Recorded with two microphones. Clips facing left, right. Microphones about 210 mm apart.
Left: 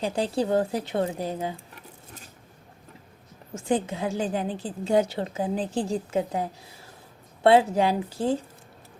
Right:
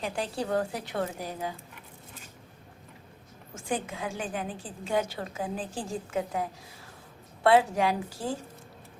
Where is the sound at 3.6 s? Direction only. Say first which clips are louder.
Left 7 dB; 25° left (ahead or behind).